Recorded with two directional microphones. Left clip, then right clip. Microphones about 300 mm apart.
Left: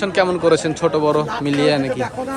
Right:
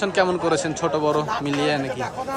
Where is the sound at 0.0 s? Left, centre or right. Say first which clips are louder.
Left 4 dB; centre.